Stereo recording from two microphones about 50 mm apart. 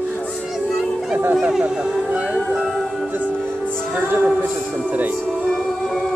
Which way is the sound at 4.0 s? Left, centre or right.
Right.